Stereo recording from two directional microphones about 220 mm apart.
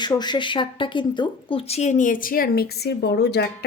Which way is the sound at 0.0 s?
20° left (ahead or behind).